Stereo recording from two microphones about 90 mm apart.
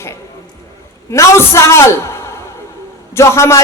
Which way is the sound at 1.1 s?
35° left (ahead or behind).